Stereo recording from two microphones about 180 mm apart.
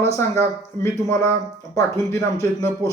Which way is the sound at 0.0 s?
15° left (ahead or behind).